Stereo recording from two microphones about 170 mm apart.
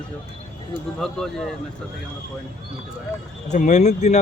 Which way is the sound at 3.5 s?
45° left (ahead or behind).